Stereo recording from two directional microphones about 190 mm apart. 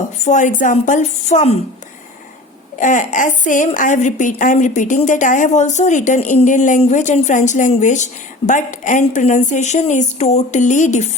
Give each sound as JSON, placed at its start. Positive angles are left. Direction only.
{"t": 0.3, "sound": "a woman's voice", "side_deg": 40}
{"t": 2.7, "sound": "a woman's voice", "side_deg": 40}